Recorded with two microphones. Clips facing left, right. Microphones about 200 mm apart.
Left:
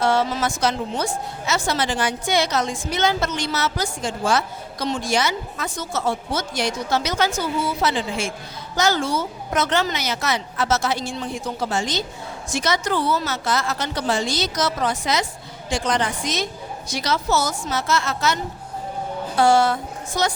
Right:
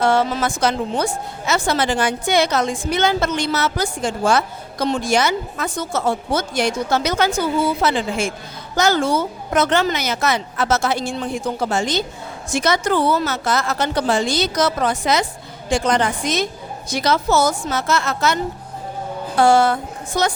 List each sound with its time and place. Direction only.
0.0 s a woman's voice: 55° right (ahead or behind)
19.4 s a woman's voice: 55° right (ahead or behind)